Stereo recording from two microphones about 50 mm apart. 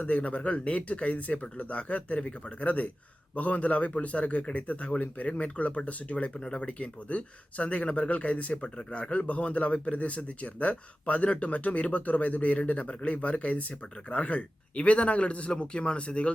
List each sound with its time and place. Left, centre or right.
0.0 s speech: left